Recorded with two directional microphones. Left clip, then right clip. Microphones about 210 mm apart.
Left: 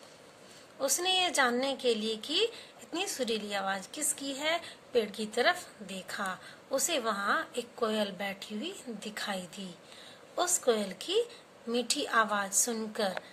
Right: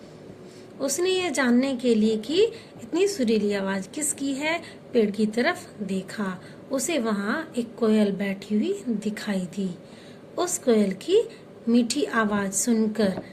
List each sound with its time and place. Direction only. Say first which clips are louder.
0.8 s a woman's voice: right 4 dB; 20° left (ahead or behind)